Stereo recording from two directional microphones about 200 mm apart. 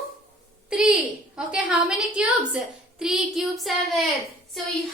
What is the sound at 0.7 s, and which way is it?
A woman's voice, 5° right (ahead or behind).